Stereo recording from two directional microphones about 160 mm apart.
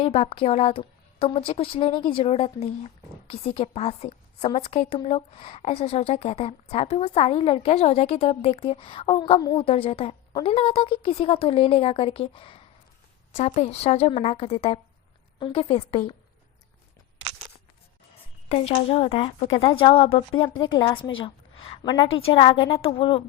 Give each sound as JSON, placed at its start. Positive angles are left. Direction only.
{"t": 0.0, "sound": "a woman's voice", "side_deg": 35}
{"t": 18.4, "sound": "a woman's voice", "side_deg": 40}